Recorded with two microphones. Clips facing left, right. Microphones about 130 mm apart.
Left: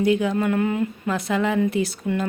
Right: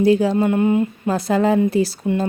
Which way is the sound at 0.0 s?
35° right (ahead or behind).